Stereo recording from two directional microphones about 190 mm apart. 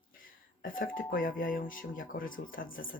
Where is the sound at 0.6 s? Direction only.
45° left (ahead or behind).